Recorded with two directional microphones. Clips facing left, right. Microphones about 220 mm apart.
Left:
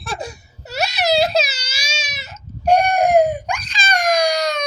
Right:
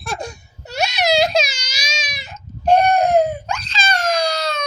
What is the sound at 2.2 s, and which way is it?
Baby cry, 10° left (ahead or behind).